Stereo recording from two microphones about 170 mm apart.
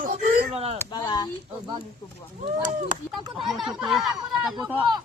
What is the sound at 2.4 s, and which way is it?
Speech, 50° right (ahead or behind).